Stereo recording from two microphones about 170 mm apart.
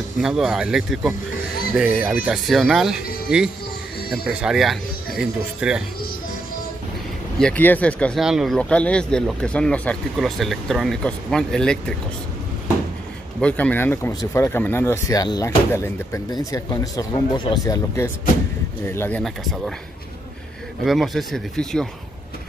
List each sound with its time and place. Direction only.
0.2 s speech: 5° right (ahead or behind)
7.3 s speech: 5° left (ahead or behind)
13.4 s speech: 10° left (ahead or behind)
20.8 s speech: centre (ahead or behind)